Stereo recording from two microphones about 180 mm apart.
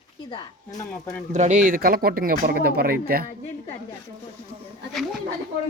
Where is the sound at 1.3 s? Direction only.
40° right (ahead or behind).